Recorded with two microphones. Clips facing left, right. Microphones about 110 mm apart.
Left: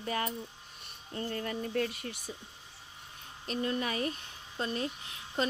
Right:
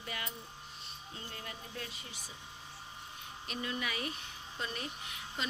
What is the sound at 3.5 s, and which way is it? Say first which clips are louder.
Speech: left 6 dB; 40° left (ahead or behind).